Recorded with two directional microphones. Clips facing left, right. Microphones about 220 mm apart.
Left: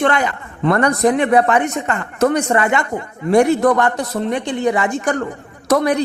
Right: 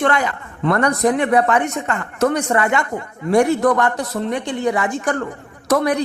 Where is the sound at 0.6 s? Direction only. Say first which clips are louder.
Left 2 dB; 20° left (ahead or behind).